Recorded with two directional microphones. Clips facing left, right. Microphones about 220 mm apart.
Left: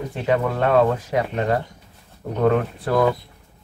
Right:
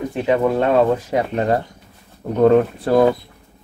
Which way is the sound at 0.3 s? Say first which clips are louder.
Right 3 dB; 25° right (ahead or behind).